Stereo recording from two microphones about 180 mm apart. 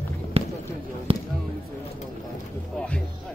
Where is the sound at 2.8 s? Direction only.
5° left (ahead or behind).